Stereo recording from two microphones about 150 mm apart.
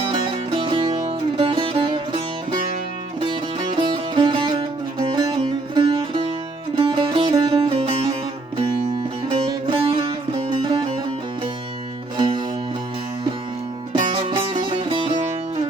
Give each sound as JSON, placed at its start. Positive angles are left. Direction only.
{"t": 0.1, "sound": "music", "side_deg": -30}
{"t": 3.8, "sound": "music", "side_deg": -30}
{"t": 9.3, "sound": "music", "side_deg": -35}
{"t": 12.1, "sound": "music", "side_deg": -35}
{"t": 13.9, "sound": "music", "side_deg": -35}